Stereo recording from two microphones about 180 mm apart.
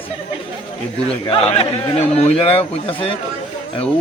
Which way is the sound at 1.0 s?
30° left (ahead or behind).